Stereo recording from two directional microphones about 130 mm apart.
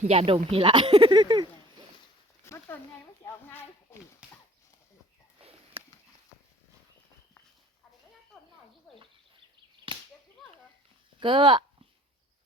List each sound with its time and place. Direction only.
0.0 s speech: 55° right (ahead or behind); by 1.5 s 35° right (ahead or behind)
2.4 s a sound: 20° left (ahead or behind)
3.2 s speech: 15° left (ahead or behind)
9.9 s whip: 40° right (ahead or behind)
11.2 s speech: 40° right (ahead or behind)